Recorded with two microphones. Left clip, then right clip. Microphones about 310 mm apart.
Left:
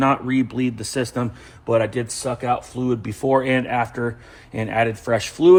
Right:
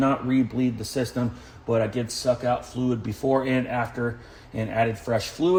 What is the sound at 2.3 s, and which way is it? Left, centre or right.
Speech, left.